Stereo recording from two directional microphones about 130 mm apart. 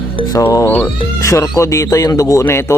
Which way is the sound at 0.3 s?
20° left (ahead or behind).